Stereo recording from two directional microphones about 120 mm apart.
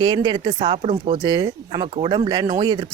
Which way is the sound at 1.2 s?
35° right (ahead or behind).